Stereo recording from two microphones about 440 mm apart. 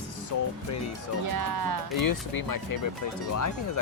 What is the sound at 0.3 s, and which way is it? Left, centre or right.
Speech, left.